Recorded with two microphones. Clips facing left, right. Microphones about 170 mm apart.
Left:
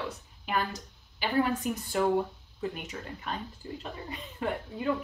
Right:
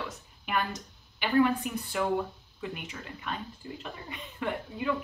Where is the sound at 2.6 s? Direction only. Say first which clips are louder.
Left 3 dB; 40° left (ahead or behind).